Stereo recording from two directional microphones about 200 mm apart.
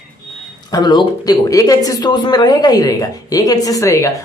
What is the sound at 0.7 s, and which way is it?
Speech, 20° left (ahead or behind).